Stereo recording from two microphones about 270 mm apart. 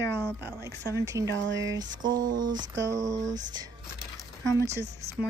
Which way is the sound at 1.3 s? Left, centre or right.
Right.